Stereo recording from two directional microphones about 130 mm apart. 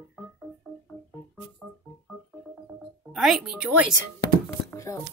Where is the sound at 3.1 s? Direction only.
5° right (ahead or behind).